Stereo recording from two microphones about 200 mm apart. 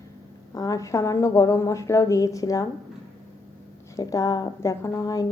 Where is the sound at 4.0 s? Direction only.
20° left (ahead or behind).